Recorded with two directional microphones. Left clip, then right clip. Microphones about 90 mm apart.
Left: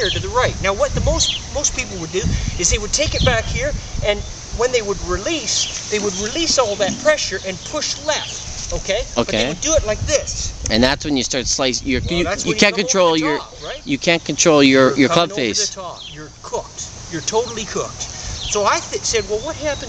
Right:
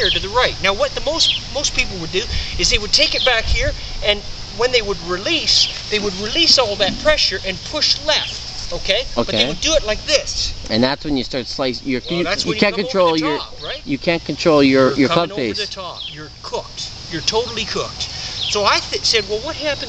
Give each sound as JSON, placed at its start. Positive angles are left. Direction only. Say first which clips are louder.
{"t": 0.3, "sound": "speech", "louder": "right 1 dB", "side_deg": 0}
{"t": 9.1, "sound": "speech", "louder": "even", "side_deg": 45}
{"t": 9.6, "sound": "speech", "louder": "right 1 dB", "side_deg": 5}
{"t": 10.7, "sound": "speech", "louder": "left 2 dB", "side_deg": 45}
{"t": 17.1, "sound": "speech", "louder": "even", "side_deg": 0}